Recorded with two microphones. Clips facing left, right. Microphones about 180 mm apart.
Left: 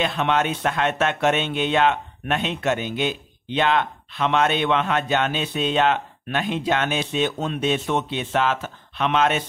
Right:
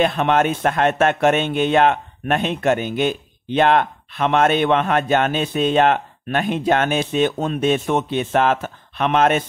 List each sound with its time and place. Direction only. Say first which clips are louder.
0.0 s speech: right 5 dB; 50° right (ahead or behind)